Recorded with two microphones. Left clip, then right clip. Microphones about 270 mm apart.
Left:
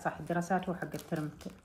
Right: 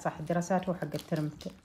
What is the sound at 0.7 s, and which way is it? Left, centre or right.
Speech, right.